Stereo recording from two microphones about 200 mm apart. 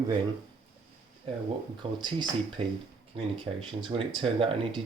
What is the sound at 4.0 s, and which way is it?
Speech, 25° right (ahead or behind).